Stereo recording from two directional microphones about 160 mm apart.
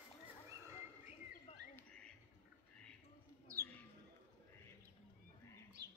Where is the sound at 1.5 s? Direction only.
40° left (ahead or behind).